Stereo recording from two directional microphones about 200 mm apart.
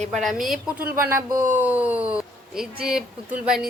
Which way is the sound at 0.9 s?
10° right (ahead or behind).